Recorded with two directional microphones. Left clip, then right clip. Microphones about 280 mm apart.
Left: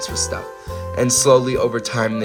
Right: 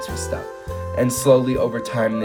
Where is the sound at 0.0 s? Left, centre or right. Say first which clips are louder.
Left 3 dB; left.